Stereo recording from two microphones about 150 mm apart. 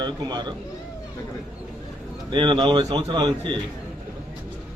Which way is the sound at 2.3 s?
30° right (ahead or behind).